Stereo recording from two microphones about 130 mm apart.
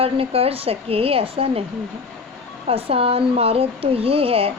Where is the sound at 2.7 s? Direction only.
50° right (ahead or behind).